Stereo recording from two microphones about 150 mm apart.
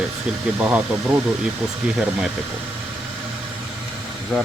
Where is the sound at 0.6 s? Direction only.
10° right (ahead or behind).